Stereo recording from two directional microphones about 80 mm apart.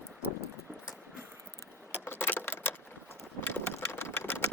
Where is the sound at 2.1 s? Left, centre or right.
Left.